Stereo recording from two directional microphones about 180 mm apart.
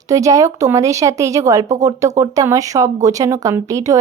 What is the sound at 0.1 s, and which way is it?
Speech, 15° right (ahead or behind).